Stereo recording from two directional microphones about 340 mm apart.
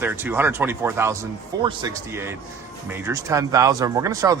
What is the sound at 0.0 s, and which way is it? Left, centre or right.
Speech, centre.